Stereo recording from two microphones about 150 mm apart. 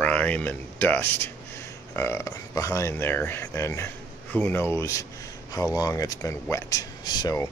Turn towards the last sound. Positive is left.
turn(degrees=25)  # may be behind; listen again after turning